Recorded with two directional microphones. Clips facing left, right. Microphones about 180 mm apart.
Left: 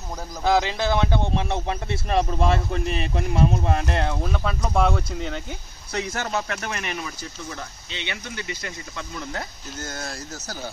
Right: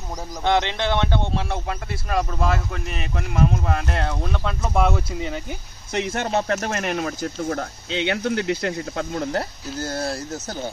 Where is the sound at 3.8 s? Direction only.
15° left (ahead or behind).